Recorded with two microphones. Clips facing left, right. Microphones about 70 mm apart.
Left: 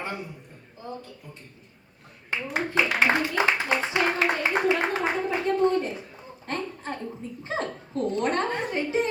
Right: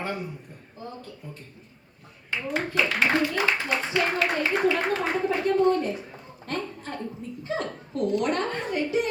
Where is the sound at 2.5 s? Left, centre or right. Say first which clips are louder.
Left 1 dB; left.